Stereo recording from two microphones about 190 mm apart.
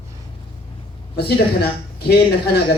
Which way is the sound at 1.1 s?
55° left (ahead or behind).